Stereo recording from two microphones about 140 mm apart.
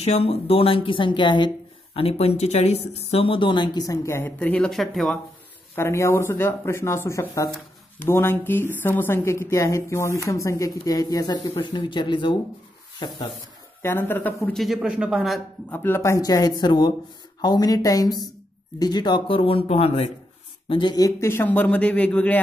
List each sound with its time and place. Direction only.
0.0 s speech: 50° left (ahead or behind); by 1.5 s 35° left (ahead or behind)
2.0 s speech: 45° left (ahead or behind); by 5.2 s centre (ahead or behind)
5.8 s a woman's voice: 20° left (ahead or behind)
13.8 s speech: 15° left (ahead or behind); by 15.4 s centre (ahead or behind)
15.7 s speech: 15° left (ahead or behind); by 20.1 s 45° left (ahead or behind)
20.6 s a woman's voice: 30° left (ahead or behind); by 22.4 s 10° left (ahead or behind)